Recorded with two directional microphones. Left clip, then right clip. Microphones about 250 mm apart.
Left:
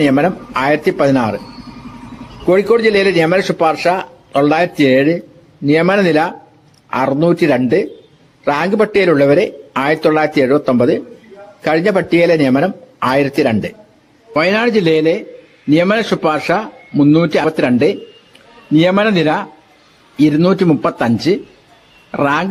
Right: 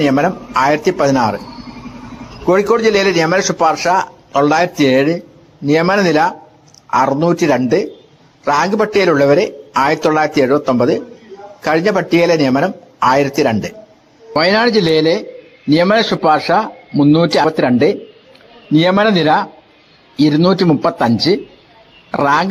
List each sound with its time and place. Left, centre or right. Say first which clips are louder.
0.0 s a man's voice: left 1 dB; left
2.5 s a man's voice: left 1 dB; centre
14.3 s speech: right 1 dB; centre
22.1 s speech: right 2 dB; centre